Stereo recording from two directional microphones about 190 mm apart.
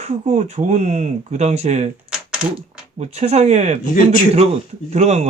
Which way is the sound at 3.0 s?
35° right (ahead or behind).